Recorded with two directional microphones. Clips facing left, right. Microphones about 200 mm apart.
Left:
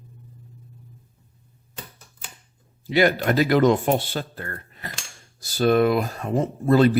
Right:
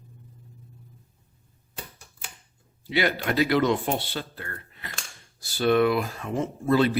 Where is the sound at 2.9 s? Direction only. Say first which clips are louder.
Left 6 dB; 45° left (ahead or behind).